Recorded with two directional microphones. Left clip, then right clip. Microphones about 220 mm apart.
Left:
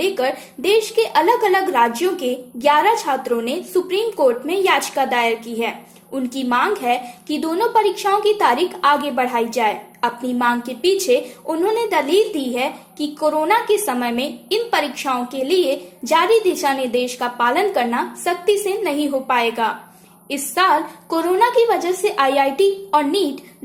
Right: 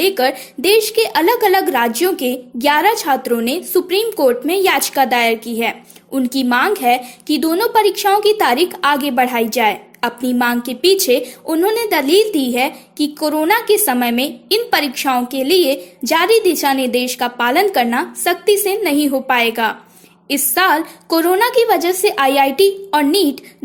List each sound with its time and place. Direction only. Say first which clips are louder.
0.0 s a woman's voice: right 4 dB; 45° right (ahead or behind)